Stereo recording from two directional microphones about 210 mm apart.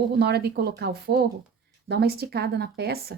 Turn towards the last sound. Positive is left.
turn(degrees=-50)  # may be behind; listen again after turning